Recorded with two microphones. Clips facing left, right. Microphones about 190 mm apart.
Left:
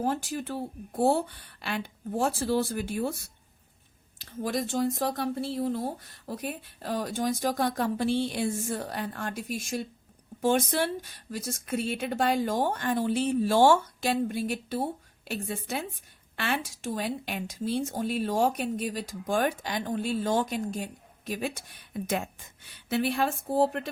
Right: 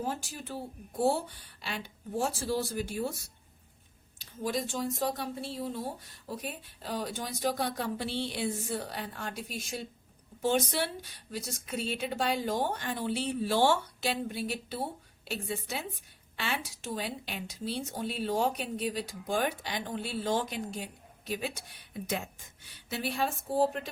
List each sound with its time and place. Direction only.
0.0 s speech: 60° left (ahead or behind)
4.2 s speech: 60° left (ahead or behind)